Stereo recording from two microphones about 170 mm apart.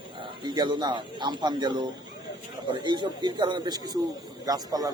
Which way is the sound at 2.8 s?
25° right (ahead or behind).